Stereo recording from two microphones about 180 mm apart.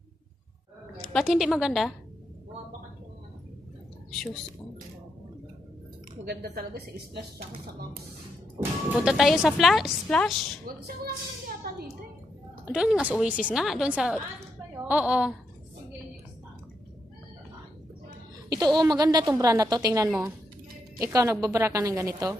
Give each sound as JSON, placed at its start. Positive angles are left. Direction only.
{"t": 1.0, "sound": "a woman's voice", "side_deg": 0}
{"t": 6.2, "sound": "speech", "side_deg": -60}
{"t": 9.0, "sound": "a woman's voice", "side_deg": 0}
{"t": 10.6, "sound": "speech", "side_deg": -60}
{"t": 12.7, "sound": "a woman's voice", "side_deg": -5}
{"t": 18.5, "sound": "a woman's voice", "side_deg": -20}